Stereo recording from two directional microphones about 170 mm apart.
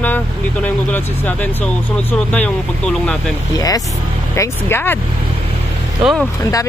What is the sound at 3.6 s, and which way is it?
Speech, 20° left (ahead or behind).